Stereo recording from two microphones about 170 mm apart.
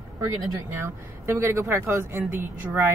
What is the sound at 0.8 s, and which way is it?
Speech, 15° right (ahead or behind).